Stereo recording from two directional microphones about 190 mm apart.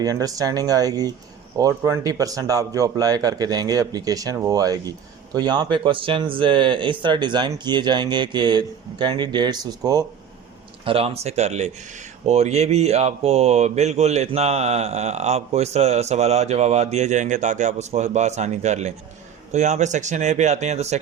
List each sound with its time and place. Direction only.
0.0 s a man's voice: 20° right (ahead or behind)
10.8 s speech: 30° right (ahead or behind)